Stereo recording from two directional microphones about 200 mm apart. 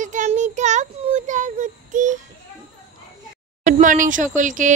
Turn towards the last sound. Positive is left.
turn(degrees=-40)  # may be behind; listen again after turning